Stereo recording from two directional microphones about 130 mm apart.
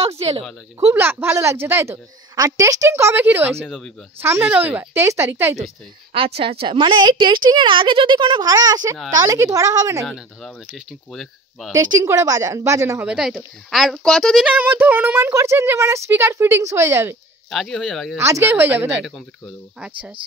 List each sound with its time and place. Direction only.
0.0 s a sound: 50° right (ahead or behind)
0.9 s a woman's voice: 15° right (ahead or behind)
3.6 s speech: centre (ahead or behind)
4.2 s speech: 15° right (ahead or behind)
6.1 s a woman's voice: 45° right (ahead or behind); by 10.0 s 25° right (ahead or behind)
10.0 s speech: centre (ahead or behind)
11.7 s a woman's voice: 25° right (ahead or behind)
13.0 s speech: 5° right (ahead or behind)
17.5 s speech: centre (ahead or behind)
18.1 s a woman's voice: 20° right (ahead or behind)
19.0 s speech: centre (ahead or behind)